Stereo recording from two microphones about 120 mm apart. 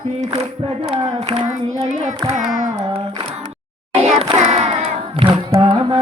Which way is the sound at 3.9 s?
65° right (ahead or behind).